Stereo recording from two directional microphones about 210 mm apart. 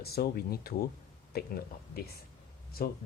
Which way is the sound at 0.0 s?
45° left (ahead or behind).